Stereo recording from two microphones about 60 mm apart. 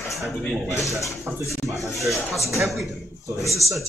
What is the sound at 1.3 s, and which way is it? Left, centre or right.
Speech, right.